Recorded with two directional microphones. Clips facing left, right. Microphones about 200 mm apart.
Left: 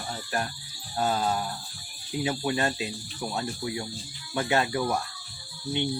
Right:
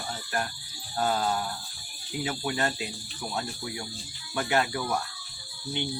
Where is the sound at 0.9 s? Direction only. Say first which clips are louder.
Left 1 dB; 15° left (ahead or behind).